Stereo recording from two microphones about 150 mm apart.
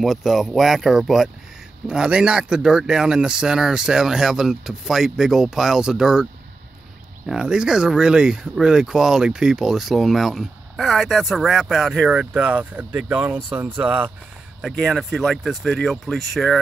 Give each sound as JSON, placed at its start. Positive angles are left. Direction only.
{"t": 0.0, "sound": "speech", "side_deg": 0}
{"t": 7.2, "sound": "speech", "side_deg": -5}